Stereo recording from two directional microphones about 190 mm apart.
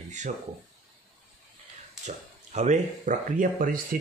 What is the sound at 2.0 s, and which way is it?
Speech, 35° right (ahead or behind).